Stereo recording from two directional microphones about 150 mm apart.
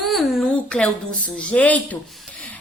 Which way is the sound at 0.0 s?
Centre (ahead or behind).